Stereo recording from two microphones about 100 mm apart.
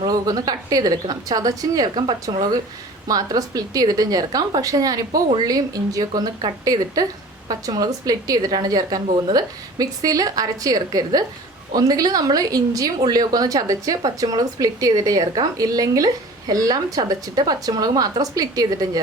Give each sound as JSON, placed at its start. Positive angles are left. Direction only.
{"t": 0.0, "sound": "a woman's voice", "side_deg": -40}